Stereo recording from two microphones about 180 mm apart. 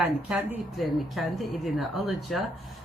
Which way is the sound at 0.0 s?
5° right (ahead or behind).